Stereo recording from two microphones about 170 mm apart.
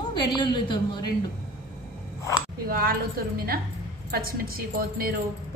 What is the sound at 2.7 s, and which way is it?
A woman's voice, 60° right (ahead or behind).